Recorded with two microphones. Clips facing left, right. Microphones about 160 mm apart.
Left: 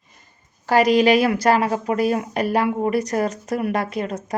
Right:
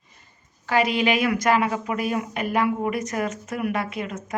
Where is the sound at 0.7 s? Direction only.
40° left (ahead or behind).